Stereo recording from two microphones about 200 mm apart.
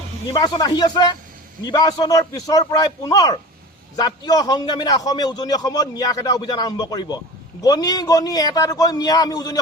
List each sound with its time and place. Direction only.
0.3 s a man's voice: 20° left (ahead or behind)